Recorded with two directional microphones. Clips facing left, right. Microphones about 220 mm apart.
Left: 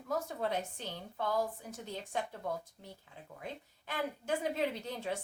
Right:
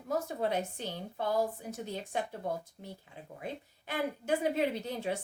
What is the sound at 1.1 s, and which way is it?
Speech, 30° right (ahead or behind).